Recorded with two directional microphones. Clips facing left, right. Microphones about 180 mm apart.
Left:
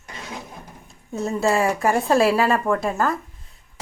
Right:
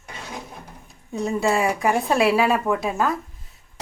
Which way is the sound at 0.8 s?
Centre (ahead or behind).